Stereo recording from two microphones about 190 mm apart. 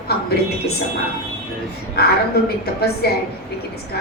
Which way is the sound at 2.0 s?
55° left (ahead or behind).